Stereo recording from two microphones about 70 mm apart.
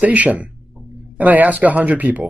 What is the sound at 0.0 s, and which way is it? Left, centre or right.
Speech, right.